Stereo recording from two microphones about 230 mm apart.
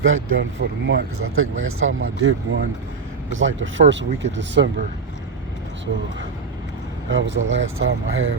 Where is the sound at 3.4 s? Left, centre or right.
Right.